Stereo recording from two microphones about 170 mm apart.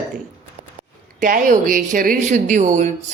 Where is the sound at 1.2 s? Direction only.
55° right (ahead or behind).